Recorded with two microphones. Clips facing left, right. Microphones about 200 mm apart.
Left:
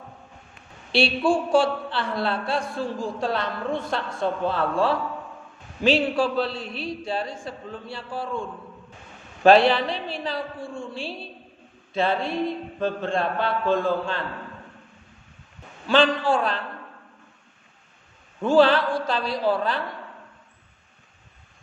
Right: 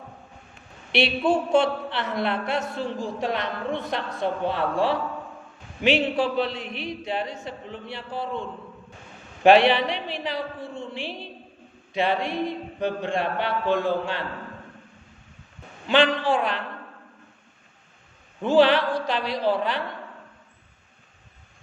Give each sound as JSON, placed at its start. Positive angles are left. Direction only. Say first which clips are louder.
{"t": 0.9, "sound": "a woman's voice", "louder": "left 1 dB", "side_deg": -20}
{"t": 15.9, "sound": "a woman's voice", "louder": "left 1 dB", "side_deg": -20}
{"t": 18.4, "sound": "speech", "louder": "left 1 dB", "side_deg": -15}